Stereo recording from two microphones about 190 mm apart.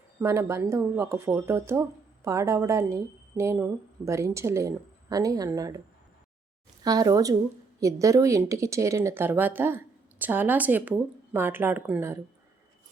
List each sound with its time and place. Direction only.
0.2 s speech: 15° right (ahead or behind)
6.8 s speech: 20° right (ahead or behind)